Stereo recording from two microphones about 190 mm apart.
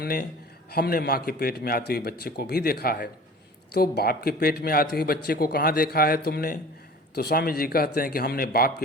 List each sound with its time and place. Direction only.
0.0 s speech: 50° left (ahead or behind)